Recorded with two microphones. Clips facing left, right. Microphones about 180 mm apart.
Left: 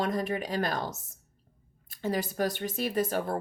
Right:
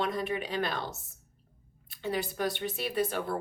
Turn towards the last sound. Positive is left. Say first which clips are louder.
# left 2 dB
turn(degrees=40)  # may be behind; listen again after turning